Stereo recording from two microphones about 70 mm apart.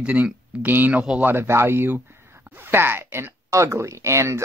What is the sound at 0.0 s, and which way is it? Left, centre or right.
Speech, right.